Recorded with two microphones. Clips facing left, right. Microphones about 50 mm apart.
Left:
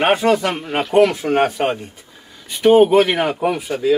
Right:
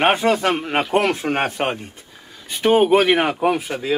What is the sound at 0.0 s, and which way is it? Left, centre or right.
Speech, right.